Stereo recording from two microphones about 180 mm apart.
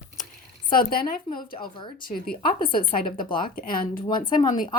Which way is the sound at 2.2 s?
55° left (ahead or behind).